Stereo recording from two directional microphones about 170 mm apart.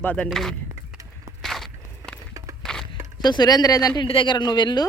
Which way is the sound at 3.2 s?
25° left (ahead or behind).